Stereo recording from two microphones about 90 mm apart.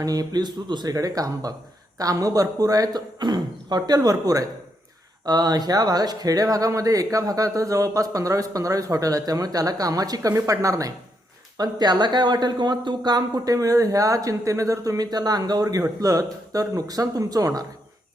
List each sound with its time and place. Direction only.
0.0 s speech: 45° right (ahead or behind)
11.5 s speech: 50° right (ahead or behind)